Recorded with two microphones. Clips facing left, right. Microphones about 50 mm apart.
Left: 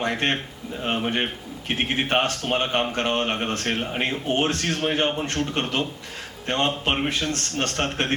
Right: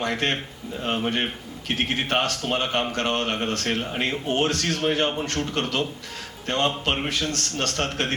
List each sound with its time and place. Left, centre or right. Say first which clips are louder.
0.0 s a man's voice: left 1 dB; left
0.8 s speech: even; centre
1.6 s a man's voice: left 1 dB; left
2.5 s a man's voice: left 1 dB; centre
3.9 s speech: even; centre
4.3 s a man's voice: even; left